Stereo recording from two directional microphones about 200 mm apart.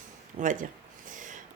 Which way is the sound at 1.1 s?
40° right (ahead or behind).